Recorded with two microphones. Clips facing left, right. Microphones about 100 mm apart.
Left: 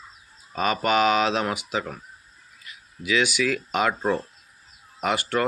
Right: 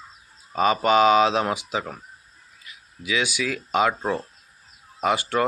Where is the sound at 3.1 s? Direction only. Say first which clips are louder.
Left 3 dB; 15° right (ahead or behind).